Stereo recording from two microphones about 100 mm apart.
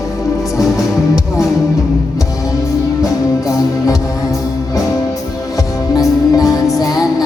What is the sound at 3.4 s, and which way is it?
Music, 35° left (ahead or behind).